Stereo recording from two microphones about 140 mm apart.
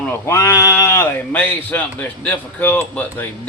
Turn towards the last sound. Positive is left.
turn(degrees=15)  # may be behind; listen again after turning